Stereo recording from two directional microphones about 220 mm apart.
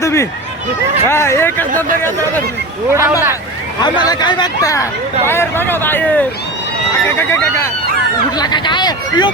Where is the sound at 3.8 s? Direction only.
20° left (ahead or behind).